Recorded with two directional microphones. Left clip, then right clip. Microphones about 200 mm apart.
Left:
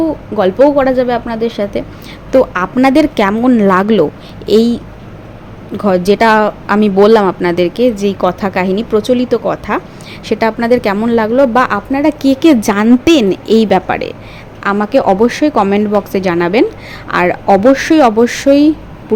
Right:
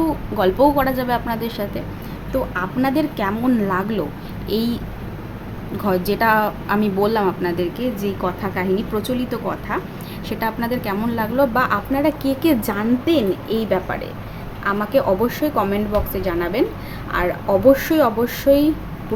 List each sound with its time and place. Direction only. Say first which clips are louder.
0.0 s a woman's voice: left 6 dB; 25° left (ahead or behind)
2.3 s speech: left 12 dB; 40° left (ahead or behind)